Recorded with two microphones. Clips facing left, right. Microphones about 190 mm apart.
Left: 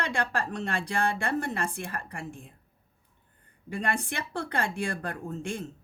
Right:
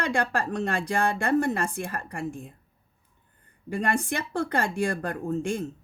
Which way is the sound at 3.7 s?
45° right (ahead or behind).